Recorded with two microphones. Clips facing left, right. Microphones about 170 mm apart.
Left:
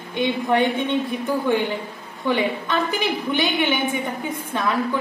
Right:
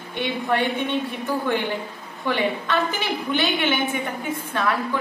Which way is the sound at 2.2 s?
15° left (ahead or behind).